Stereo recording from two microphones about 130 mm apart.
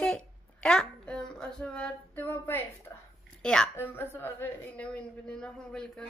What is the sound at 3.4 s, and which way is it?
Speech, 5° left (ahead or behind).